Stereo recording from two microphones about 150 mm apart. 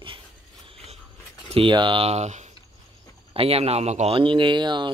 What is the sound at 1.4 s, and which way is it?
Speech, 35° right (ahead or behind).